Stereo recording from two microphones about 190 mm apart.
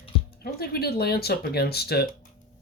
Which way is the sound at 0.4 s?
55° left (ahead or behind).